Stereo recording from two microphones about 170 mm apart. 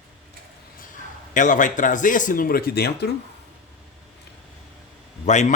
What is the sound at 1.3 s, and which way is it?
Speech, 50° left (ahead or behind).